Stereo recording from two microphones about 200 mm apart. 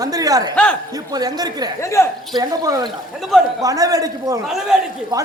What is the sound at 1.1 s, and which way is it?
Speech, 20° right (ahead or behind).